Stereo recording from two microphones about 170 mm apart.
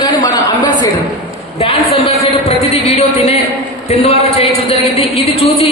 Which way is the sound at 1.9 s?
35° left (ahead or behind).